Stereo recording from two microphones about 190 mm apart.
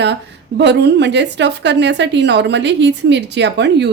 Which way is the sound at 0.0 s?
65° right (ahead or behind).